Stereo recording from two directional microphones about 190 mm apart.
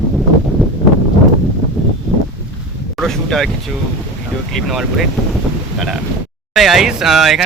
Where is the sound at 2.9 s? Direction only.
Centre (ahead or behind).